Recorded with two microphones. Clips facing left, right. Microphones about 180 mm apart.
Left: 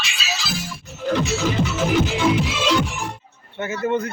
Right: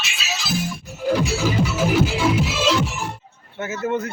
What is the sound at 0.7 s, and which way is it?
Music, 10° right (ahead or behind).